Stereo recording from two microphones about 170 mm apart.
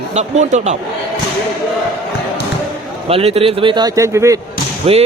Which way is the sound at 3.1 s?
35° right (ahead or behind).